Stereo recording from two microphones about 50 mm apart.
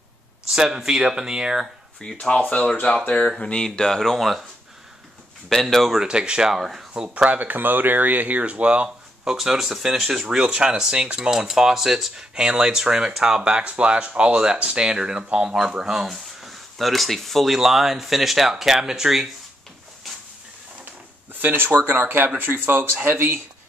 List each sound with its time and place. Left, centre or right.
0.5 s speech: centre
2.1 s speech: left; by 4.4 s centre
5.5 s speech: centre
5.9 s speech: centre
7.2 s speech: right
8.8 s speech: centre
12.4 s speech: centre
20.8 s a sound: right
21.9 s speech: right